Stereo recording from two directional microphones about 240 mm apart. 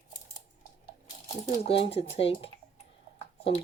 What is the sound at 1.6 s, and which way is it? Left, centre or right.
Speech, left.